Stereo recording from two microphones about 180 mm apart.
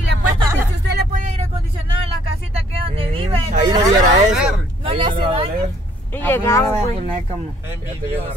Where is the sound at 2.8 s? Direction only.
30° right (ahead or behind).